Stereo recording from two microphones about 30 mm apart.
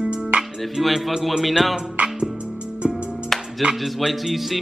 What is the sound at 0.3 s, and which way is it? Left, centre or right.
Music, right.